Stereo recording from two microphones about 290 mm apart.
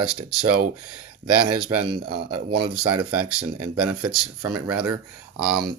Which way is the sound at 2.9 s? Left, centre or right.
Right.